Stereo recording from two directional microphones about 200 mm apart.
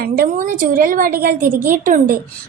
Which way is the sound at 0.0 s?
45° right (ahead or behind).